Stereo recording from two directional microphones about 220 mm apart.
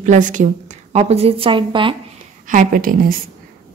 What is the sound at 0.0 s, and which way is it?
A woman's voice, 35° right (ahead or behind).